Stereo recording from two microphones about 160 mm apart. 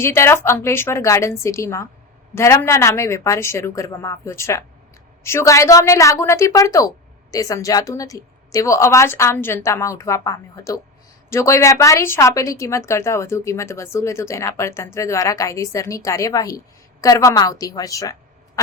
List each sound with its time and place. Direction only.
0.0 s a woman's voice: 15° left (ahead or behind)